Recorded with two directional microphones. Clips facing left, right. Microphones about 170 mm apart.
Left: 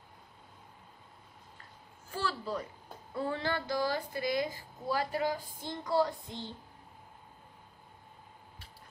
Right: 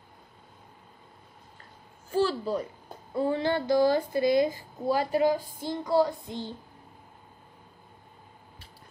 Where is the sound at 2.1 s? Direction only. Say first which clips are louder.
Right 9 dB; 20° right (ahead or behind).